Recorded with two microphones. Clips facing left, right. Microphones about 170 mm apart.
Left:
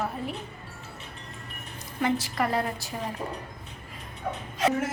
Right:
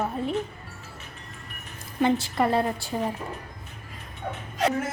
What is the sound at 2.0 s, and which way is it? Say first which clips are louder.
Speech: right 4 dB; 25° right (ahead or behind).